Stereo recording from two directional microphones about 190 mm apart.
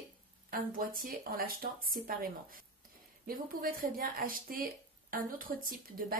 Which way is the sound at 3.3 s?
50° right (ahead or behind).